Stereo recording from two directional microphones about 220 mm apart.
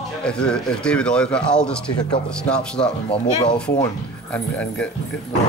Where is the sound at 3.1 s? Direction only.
20° left (ahead or behind).